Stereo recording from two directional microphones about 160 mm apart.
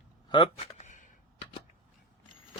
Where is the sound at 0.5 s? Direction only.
45° left (ahead or behind).